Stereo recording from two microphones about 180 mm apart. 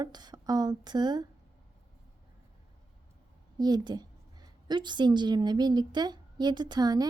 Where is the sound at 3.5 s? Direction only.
20° right (ahead or behind).